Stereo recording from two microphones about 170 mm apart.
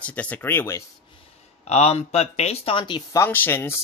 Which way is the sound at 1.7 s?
40° left (ahead or behind).